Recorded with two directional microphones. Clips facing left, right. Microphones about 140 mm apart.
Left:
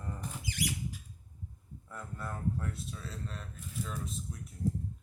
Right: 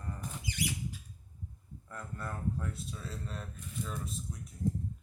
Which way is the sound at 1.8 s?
Centre (ahead or behind).